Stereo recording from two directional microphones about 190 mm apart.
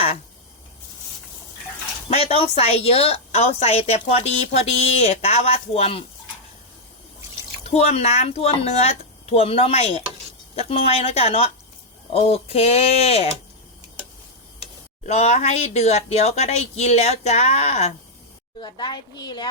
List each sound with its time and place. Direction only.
2.0 s a woman's voice: 35° left (ahead or behind)
7.8 s a woman's voice: 35° left (ahead or behind)
15.0 s a woman's voice: 35° left (ahead or behind)
18.6 s a woman's voice: 25° left (ahead or behind)